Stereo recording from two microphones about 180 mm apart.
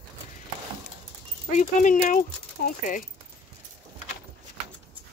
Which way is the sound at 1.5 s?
45° left (ahead or behind).